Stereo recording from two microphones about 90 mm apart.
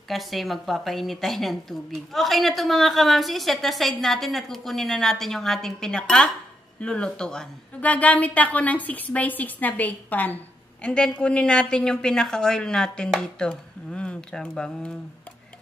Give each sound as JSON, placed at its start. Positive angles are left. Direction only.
{"t": 0.1, "sound": "a woman's voice", "side_deg": 0}